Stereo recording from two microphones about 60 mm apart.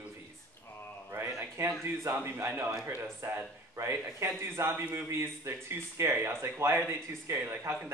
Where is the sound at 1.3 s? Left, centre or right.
Right.